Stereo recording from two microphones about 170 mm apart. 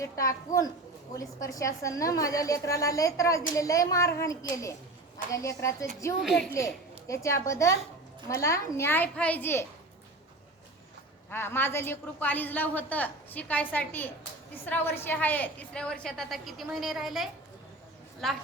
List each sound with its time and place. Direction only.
0.0 s a woman's voice: 20° left (ahead or behind)
6.2 s a woman's voice: centre (ahead or behind)
7.1 s a woman's voice: 20° left (ahead or behind)
11.3 s a woman's voice: 15° left (ahead or behind)